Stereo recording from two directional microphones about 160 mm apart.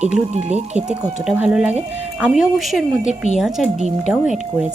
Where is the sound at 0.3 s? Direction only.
45° right (ahead or behind).